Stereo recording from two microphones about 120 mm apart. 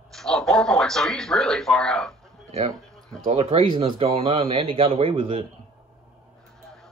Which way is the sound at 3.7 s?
45° right (ahead or behind).